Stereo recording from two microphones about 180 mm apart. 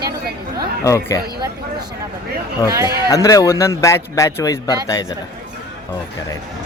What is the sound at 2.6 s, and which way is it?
Speech, 20° right (ahead or behind).